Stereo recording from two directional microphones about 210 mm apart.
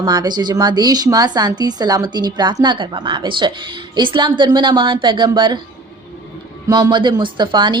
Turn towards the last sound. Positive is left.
turn(degrees=-20)  # may be behind; listen again after turning